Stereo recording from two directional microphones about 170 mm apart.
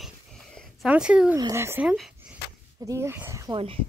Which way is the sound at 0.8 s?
5° right (ahead or behind).